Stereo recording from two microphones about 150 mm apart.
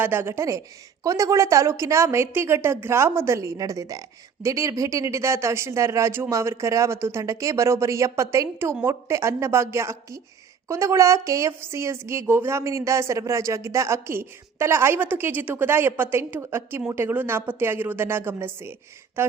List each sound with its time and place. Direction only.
0.0 s a woman's voice: 15° right (ahead or behind)